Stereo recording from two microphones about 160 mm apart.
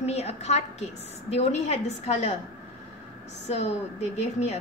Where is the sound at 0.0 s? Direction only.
40° left (ahead or behind).